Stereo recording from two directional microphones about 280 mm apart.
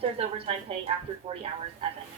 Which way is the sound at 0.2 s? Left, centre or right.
Right.